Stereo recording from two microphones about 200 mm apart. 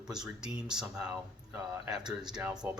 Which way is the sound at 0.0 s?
5° right (ahead or behind).